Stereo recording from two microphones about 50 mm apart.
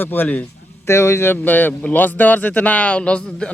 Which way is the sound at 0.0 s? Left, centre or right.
Left.